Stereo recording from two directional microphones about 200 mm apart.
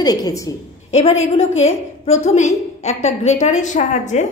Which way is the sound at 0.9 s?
35° left (ahead or behind).